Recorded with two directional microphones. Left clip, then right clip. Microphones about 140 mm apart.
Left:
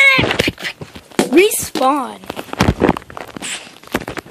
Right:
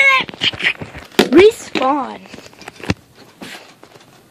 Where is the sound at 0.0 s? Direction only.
25° left (ahead or behind).